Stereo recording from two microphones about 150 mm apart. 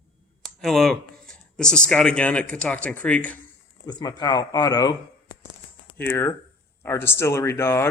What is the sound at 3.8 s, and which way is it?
Speech, 30° left (ahead or behind).